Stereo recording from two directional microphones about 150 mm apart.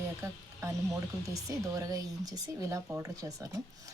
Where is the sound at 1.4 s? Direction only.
20° right (ahead or behind).